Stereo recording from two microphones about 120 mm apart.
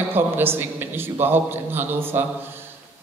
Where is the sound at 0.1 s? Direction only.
20° right (ahead or behind).